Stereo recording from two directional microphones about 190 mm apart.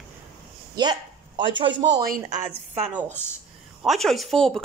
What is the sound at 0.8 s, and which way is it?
A woman's voice, 25° right (ahead or behind).